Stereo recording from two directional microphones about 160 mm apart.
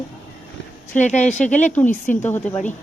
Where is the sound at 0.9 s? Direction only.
50° left (ahead or behind).